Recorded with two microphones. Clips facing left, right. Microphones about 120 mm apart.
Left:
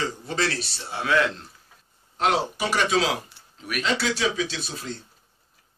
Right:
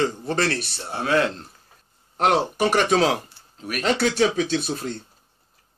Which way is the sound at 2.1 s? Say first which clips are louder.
Right 4 dB; 50° right (ahead or behind).